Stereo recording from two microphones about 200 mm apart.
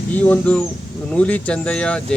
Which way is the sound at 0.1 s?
5° left (ahead or behind).